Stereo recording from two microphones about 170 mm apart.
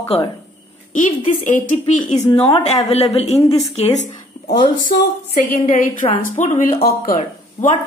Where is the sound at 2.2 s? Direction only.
10° left (ahead or behind).